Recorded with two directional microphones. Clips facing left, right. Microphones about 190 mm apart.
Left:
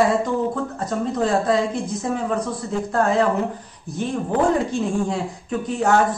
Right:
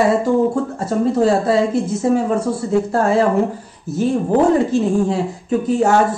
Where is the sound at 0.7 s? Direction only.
10° right (ahead or behind).